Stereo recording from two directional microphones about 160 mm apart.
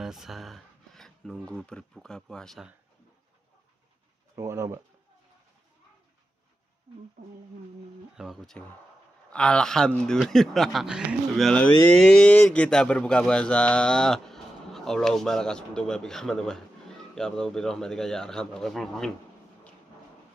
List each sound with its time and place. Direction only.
0.0 s a sound: 5° right (ahead or behind)
1.5 s speech: 5° left (ahead or behind)
4.4 s speech: 15° right (ahead or behind)
8.2 s speech: centre (ahead or behind)